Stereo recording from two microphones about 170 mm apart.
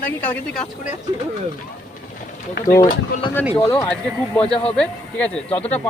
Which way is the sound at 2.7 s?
20° left (ahead or behind).